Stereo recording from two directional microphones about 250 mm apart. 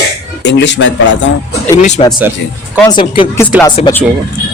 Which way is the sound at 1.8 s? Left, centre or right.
Left.